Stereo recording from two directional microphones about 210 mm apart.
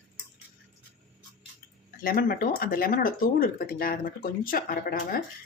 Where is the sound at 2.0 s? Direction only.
45° left (ahead or behind).